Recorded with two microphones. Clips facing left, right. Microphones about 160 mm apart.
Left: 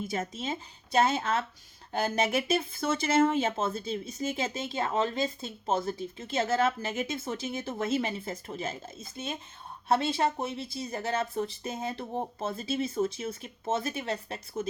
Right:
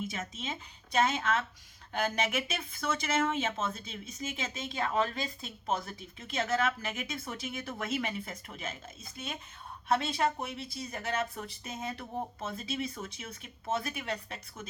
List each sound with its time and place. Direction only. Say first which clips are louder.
0.0 s speech: left 5 dB; 35° left (ahead or behind)